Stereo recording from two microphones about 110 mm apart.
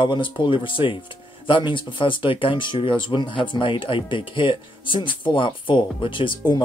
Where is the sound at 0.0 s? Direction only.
45° left (ahead or behind).